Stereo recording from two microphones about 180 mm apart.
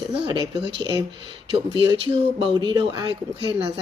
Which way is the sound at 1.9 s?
25° right (ahead or behind).